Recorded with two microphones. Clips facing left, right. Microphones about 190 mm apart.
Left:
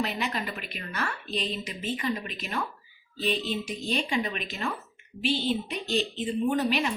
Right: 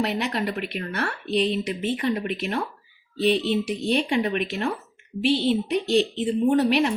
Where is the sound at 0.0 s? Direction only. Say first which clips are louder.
Right 5 dB; 70° right (ahead or behind).